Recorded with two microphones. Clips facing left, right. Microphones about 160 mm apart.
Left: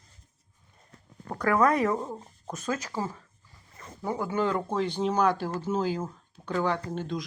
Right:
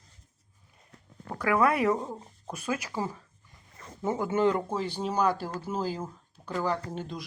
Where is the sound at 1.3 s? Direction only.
5° right (ahead or behind).